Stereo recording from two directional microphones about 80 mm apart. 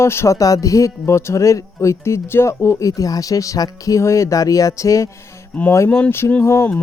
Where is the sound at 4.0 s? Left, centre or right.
Left.